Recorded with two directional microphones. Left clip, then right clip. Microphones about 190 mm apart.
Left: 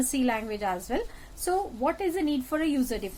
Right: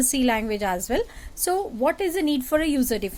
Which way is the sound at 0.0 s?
50° right (ahead or behind).